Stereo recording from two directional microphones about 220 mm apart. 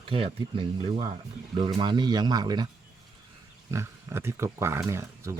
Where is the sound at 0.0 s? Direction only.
25° right (ahead or behind).